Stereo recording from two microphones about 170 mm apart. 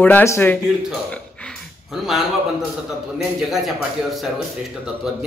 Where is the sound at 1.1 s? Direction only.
5° left (ahead or behind).